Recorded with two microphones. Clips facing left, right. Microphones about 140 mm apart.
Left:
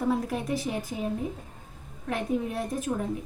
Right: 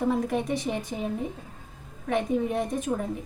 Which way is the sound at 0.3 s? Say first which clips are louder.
Right 2 dB; centre (ahead or behind).